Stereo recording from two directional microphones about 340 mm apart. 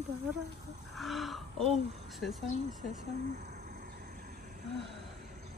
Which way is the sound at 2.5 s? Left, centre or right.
Centre.